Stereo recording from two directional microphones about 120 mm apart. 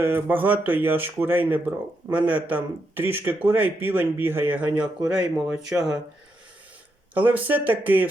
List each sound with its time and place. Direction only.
0.0 s speech: 15° right (ahead or behind)
7.1 s speech: 15° right (ahead or behind)